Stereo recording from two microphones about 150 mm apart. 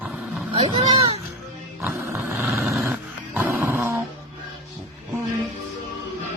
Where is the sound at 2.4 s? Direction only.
Centre (ahead or behind).